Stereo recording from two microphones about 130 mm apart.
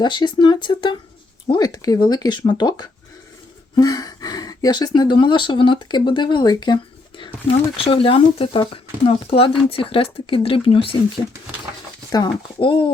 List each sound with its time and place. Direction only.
0.0 s speech: 35° left (ahead or behind)
7.5 s speech: 45° left (ahead or behind)
12.1 s speech: 35° left (ahead or behind)